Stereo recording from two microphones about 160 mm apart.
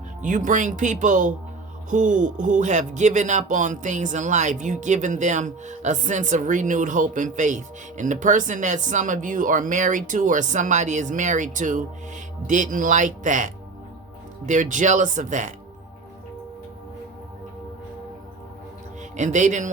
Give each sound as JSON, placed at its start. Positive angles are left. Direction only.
{"t": 0.2, "sound": "speech", "side_deg": -55}
{"t": 19.1, "sound": "speech", "side_deg": -50}